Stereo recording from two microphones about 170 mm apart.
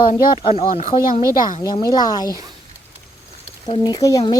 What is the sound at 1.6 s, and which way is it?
Speech, 20° left (ahead or behind).